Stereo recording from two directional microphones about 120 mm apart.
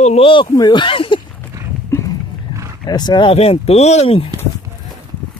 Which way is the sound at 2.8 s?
35° left (ahead or behind).